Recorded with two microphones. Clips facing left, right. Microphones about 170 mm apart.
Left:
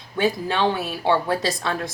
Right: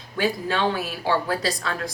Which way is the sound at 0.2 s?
25° left (ahead or behind).